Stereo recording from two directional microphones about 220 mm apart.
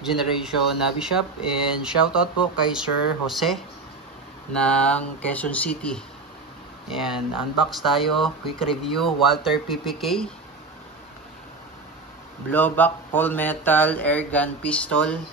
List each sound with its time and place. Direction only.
0.0 s speech: centre (ahead or behind)
4.6 s speech: 5° left (ahead or behind)
12.4 s speech: 10° left (ahead or behind)